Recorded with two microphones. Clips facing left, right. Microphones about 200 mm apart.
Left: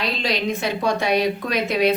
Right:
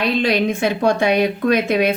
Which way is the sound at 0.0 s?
55° right (ahead or behind).